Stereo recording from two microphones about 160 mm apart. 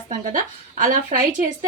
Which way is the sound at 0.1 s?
55° right (ahead or behind).